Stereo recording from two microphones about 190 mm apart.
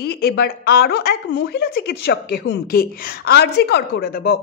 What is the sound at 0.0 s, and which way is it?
A woman's voice, 55° left (ahead or behind).